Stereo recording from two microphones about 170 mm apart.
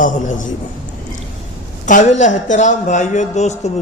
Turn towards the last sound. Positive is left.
turn(degrees=40)  # may be behind; listen again after turning